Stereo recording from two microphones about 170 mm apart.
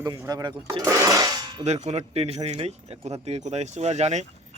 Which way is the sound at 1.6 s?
40° right (ahead or behind).